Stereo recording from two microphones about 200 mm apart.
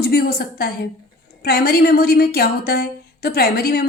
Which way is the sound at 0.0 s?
50° left (ahead or behind).